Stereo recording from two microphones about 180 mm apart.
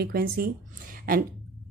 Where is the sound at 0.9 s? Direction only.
55° right (ahead or behind).